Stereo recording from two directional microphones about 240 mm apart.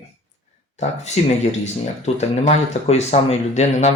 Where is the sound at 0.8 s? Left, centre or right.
Left.